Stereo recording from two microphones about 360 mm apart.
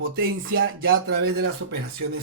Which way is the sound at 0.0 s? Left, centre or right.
Right.